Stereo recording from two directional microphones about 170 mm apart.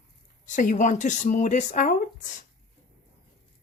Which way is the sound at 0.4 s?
50° left (ahead or behind).